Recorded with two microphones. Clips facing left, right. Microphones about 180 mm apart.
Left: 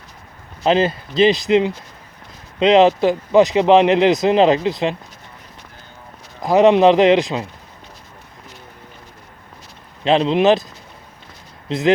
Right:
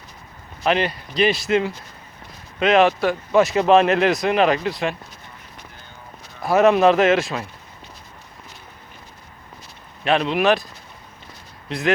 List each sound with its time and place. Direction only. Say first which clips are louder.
0.6 s speech: left 5 dB; 25° left (ahead or behind)
6.4 s speech: left 3 dB; 20° left (ahead or behind)
10.0 s speech: left 4 dB; 25° left (ahead or behind)
11.7 s speech: left 5 dB; 20° left (ahead or behind)